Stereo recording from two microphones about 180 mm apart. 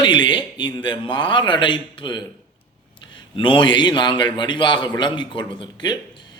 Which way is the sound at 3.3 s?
25° left (ahead or behind).